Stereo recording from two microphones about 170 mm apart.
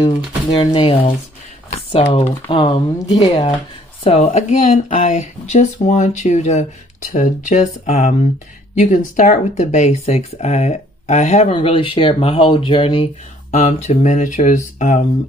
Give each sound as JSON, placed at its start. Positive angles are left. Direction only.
{"t": 0.0, "sound": "speech", "side_deg": 25}
{"t": 4.0, "sound": "speech", "side_deg": 40}